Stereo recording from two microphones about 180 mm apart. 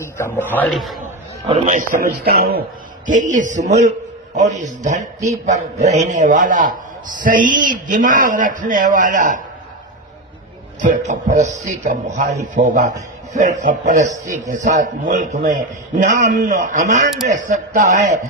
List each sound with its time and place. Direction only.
0.0 s a man's voice: 15° left (ahead or behind)
1.4 s a man's voice: 35° right (ahead or behind); by 2.6 s 60° right (ahead or behind)
3.1 s a man's voice: 45° right (ahead or behind)
10.8 s a man's voice: 45° right (ahead or behind)